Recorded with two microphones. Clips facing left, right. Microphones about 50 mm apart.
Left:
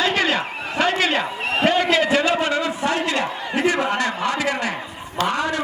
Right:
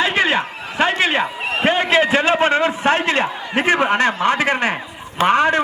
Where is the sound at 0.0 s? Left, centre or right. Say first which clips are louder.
Right 3 dB; right.